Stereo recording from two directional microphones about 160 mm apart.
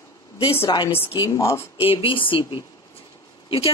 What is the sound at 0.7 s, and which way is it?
Speech, 25° left (ahead or behind).